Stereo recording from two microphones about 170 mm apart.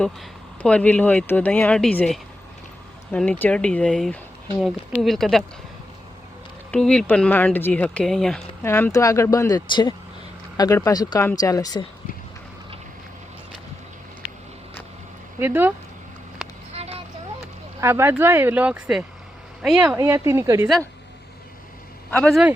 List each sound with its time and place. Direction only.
0.0 s speech: 5° left (ahead or behind)
6.7 s speech: 5° left (ahead or behind)
8.6 s speech: 15° left (ahead or behind)
15.4 s speech: 10° right (ahead or behind)
16.4 s a sound: centre (ahead or behind)
16.7 s vehicle: 35° right (ahead or behind)
17.7 s speech: 15° right (ahead or behind)